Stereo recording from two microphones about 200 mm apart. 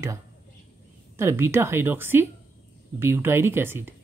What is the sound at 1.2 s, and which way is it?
Speech, 10° right (ahead or behind).